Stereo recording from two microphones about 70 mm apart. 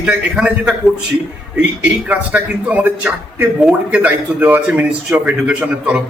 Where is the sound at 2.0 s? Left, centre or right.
Right.